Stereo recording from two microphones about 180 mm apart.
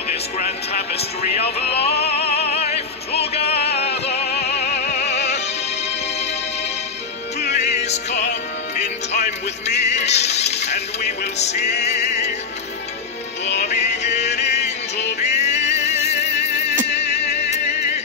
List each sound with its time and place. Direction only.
0.9 s speech: 35° left (ahead or behind)
2.0 s music: 35° left (ahead or behind)
7.5 s music: 40° left (ahead or behind)
9.7 s music: 40° left (ahead or behind)
10.7 s music: 65° left (ahead or behind)
11.3 s speech: 40° left (ahead or behind)
14.0 s music: 40° left (ahead or behind)
15.6 s music: 70° left (ahead or behind)
17.0 s music: 35° left (ahead or behind)